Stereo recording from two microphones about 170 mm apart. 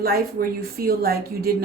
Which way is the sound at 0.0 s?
60° right (ahead or behind).